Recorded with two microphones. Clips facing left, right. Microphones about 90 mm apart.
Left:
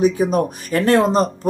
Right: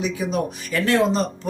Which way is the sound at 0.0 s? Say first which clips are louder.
Left 7 dB; 45° left (ahead or behind).